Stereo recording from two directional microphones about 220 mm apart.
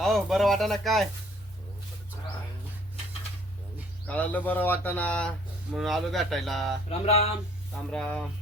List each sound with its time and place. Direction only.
0.0 s speech: centre (ahead or behind)
4.0 s speech: 5° left (ahead or behind)
7.0 s speech: 25° left (ahead or behind)
7.9 s speech: 5° left (ahead or behind)